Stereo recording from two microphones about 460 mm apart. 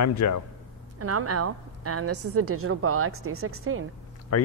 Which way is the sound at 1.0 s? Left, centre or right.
Right.